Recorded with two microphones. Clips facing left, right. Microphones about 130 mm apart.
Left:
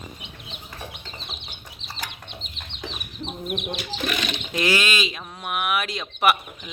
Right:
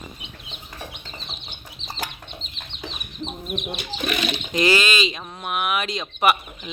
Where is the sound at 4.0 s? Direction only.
5° right (ahead or behind).